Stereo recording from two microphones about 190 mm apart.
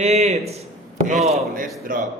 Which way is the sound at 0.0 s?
35° right (ahead or behind).